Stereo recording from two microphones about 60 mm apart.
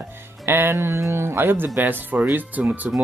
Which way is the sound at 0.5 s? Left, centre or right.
Right.